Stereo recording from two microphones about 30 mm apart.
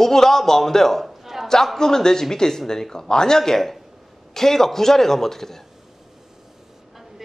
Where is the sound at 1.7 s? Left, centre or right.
Centre.